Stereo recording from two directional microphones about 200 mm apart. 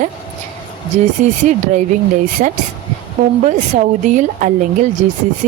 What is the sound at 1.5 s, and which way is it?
A woman's voice, 40° right (ahead or behind).